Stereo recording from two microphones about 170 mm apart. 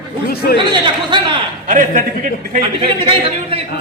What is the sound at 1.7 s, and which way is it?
Speech, 50° right (ahead or behind).